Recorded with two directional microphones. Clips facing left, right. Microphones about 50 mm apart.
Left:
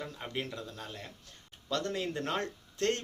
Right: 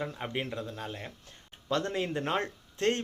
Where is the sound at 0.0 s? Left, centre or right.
Right.